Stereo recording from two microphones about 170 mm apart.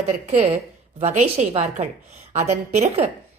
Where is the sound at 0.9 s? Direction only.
40° right (ahead or behind).